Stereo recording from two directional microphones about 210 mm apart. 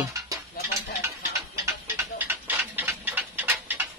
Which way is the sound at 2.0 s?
10° right (ahead or behind).